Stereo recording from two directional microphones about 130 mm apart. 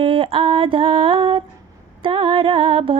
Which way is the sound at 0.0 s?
45° right (ahead or behind).